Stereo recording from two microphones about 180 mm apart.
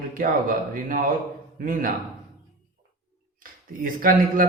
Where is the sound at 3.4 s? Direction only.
50° right (ahead or behind).